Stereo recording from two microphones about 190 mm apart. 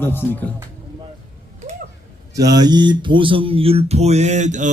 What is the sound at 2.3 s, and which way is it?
A man's voice, 20° right (ahead or behind).